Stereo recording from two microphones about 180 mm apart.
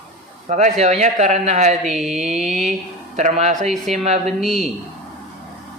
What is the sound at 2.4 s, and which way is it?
A man's voice, 40° right (ahead or behind).